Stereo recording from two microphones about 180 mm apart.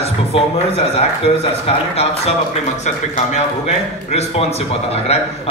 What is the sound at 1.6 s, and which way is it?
Speech, 35° left (ahead or behind).